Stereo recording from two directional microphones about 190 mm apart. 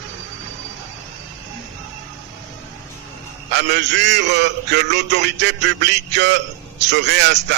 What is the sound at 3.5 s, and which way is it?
A man's voice, 65° right (ahead or behind).